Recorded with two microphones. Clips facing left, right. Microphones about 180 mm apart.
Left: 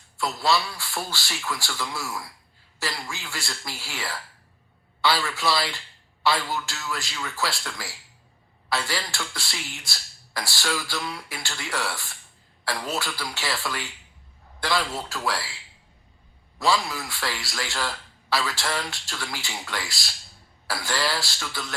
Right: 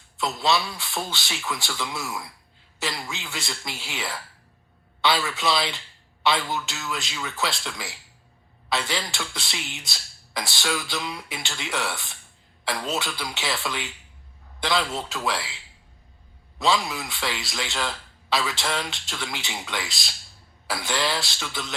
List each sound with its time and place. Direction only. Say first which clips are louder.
0.2 s speech: even; 20° right (ahead or behind)
4.9 s a sound: right 1 dB; 20° right (ahead or behind)
5.4 s speech: right 1 dB; 20° right (ahead or behind)
8.7 s speech: right 1 dB; 20° right (ahead or behind)
16.6 s speech: even; 20° right (ahead or behind)